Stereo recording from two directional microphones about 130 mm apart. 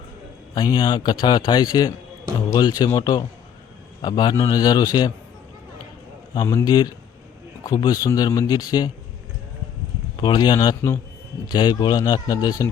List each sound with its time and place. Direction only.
0.5 s a man's voice: 35° left (ahead or behind)
6.3 s a man's voice: 25° left (ahead or behind)
10.2 s a man's voice: 35° left (ahead or behind)